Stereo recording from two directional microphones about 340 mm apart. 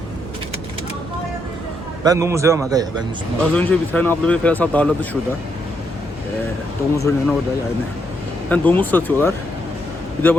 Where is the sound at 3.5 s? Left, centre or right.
Centre.